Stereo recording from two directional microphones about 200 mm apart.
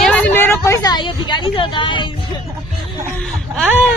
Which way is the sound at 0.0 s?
5° left (ahead or behind).